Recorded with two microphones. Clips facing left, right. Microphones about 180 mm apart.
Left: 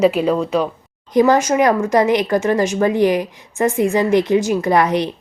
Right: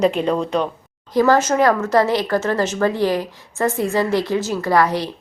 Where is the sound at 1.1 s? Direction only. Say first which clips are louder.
Left 2 dB; 15° left (ahead or behind).